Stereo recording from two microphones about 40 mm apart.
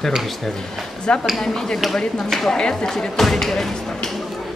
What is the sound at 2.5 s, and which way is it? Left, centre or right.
Speech, centre.